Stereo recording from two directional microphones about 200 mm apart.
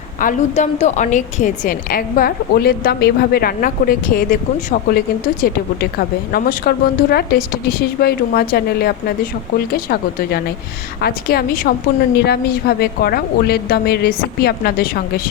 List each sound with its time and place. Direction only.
0.2 s a woman's voice: 40° left (ahead or behind)